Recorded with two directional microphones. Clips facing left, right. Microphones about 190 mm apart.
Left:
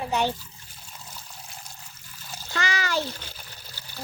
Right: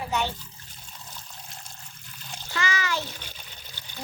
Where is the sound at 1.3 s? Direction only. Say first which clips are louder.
Left 1 dB; 5° left (ahead or behind).